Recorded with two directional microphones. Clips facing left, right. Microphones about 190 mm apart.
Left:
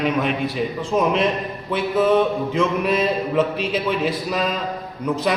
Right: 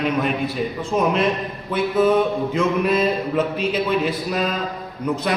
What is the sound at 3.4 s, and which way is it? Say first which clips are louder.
A man's voice: even; centre (ahead or behind).